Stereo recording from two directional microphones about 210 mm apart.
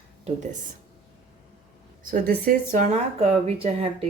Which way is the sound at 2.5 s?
35° right (ahead or behind).